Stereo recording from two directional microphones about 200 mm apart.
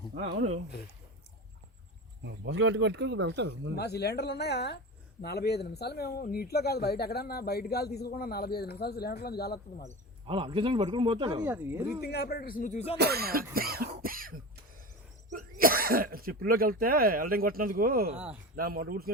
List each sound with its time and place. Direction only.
0.1 s speech: 35° right (ahead or behind)
2.2 s speech: 60° right (ahead or behind)
3.8 s speech: 55° left (ahead or behind)
10.2 s speech: 25° right (ahead or behind)
11.4 s speech: 10° right (ahead or behind)
12.0 s speech: 55° left (ahead or behind); by 13.0 s 35° left (ahead or behind)
13.0 s speech: 50° right (ahead or behind)